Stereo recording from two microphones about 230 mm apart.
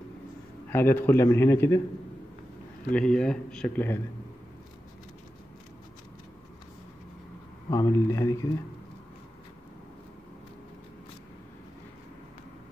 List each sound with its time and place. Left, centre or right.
0.7 s a man's voice: centre
2.9 s speech: centre
7.7 s a man's voice: centre